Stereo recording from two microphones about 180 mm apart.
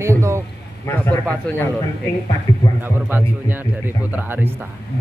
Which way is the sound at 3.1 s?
10° right (ahead or behind).